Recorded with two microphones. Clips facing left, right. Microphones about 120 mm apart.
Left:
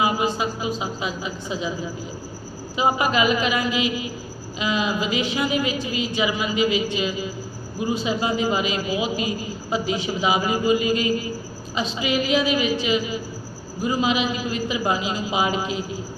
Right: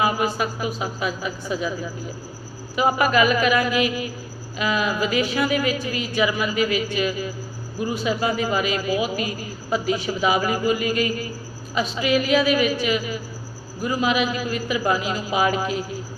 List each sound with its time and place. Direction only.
0.0 s a man's voice: 25° left (ahead or behind)
2.7 s a man's voice: 25° left (ahead or behind)